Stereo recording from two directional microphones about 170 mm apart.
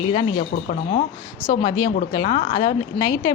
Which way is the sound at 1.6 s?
25° left (ahead or behind).